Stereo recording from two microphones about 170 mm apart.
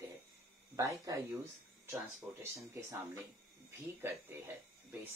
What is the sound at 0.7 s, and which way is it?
Speech, 20° right (ahead or behind).